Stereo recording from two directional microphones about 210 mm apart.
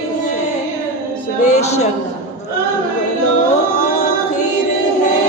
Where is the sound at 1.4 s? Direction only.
35° left (ahead or behind).